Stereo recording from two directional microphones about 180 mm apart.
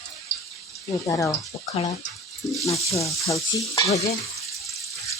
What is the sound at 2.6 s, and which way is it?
Stir, 15° left (ahead or behind).